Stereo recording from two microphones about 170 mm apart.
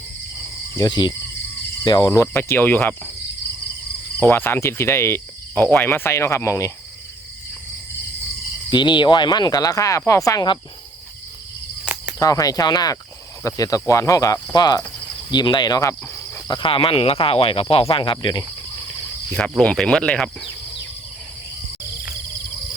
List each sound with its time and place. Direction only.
0.8 s speech: 25° left (ahead or behind)
4.2 s speech: 15° left (ahead or behind)
8.7 s speech: 25° left (ahead or behind)
12.2 s speech: 20° left (ahead or behind)
19.3 s speech: 5° left (ahead or behind)